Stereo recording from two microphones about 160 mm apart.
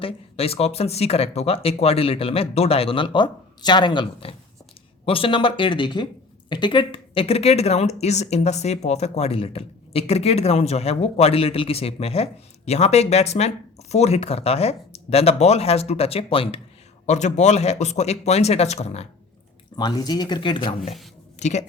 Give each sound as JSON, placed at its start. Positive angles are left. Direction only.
{"t": 0.0, "sound": "speech", "side_deg": 40}
{"t": 17.1, "sound": "speech", "side_deg": 45}
{"t": 19.7, "sound": "speech", "side_deg": 25}
{"t": 21.3, "sound": "a sound", "side_deg": 45}